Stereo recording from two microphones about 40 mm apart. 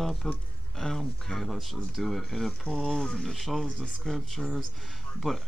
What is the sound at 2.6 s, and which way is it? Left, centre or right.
Speech, centre.